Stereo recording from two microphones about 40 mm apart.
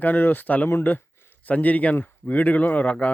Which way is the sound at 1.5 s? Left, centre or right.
Left.